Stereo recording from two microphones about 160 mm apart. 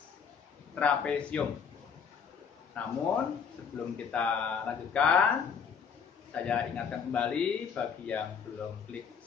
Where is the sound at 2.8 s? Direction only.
10° left (ahead or behind).